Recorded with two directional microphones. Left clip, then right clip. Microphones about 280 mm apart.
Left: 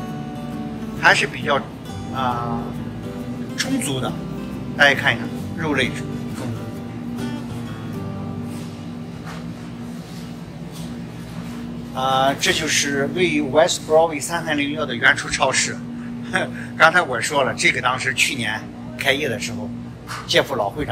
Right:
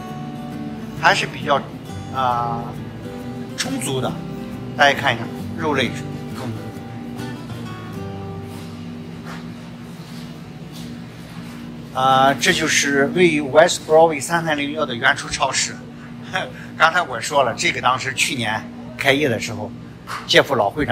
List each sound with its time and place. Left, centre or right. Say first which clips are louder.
1.0 s a man's voice: left 1 dB; centre
3.5 s a man's voice: even; centre
11.9 s a man's voice: right 4 dB; right